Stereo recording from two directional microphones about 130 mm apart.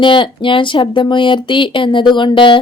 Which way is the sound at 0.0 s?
40° left (ahead or behind).